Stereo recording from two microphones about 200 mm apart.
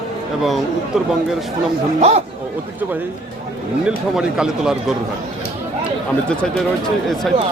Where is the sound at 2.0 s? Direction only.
30° right (ahead or behind).